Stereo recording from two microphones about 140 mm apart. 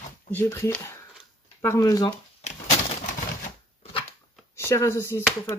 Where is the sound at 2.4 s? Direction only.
55° left (ahead or behind).